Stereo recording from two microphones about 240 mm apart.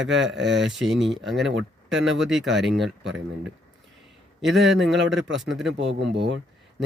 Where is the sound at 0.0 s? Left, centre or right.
Right.